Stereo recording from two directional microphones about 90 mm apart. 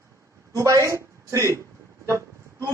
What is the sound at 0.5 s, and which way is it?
A woman's voice, 40° right (ahead or behind).